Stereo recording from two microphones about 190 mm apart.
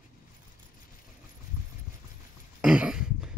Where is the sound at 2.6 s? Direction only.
5° right (ahead or behind).